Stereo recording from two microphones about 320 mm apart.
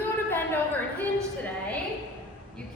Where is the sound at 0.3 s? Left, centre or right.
Centre.